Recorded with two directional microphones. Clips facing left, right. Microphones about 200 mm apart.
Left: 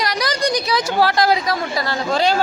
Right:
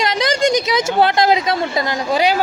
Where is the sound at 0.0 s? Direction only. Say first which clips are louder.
Right 4 dB; 25° right (ahead or behind).